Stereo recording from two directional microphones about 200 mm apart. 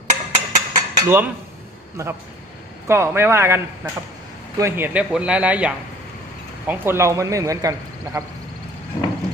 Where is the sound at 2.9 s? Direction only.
10° right (ahead or behind).